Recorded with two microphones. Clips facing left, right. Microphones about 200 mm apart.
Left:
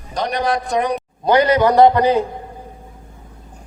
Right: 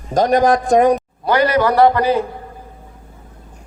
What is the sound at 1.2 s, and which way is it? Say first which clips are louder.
A man's voice: left 3 dB; 20° left (ahead or behind).